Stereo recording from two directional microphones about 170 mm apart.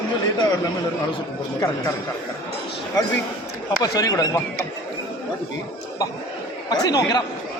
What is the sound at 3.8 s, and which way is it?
Speech, 20° left (ahead or behind).